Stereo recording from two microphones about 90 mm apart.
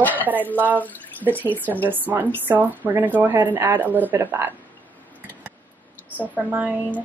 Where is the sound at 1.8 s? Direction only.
20° right (ahead or behind).